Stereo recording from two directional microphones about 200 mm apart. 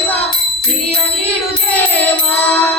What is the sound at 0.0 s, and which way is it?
Music, 10° left (ahead or behind).